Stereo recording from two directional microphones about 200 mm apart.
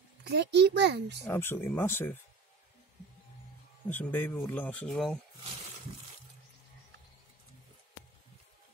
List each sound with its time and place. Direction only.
0.2 s a child's voice: 55° right (ahead or behind)
1.2 s speech: 10° left (ahead or behind)
3.9 s speech: 10° left (ahead or behind)